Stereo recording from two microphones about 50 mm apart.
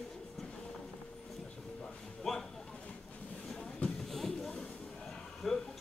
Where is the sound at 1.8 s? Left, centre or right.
Centre.